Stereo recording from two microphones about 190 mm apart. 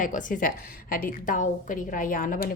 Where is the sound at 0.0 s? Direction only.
40° left (ahead or behind).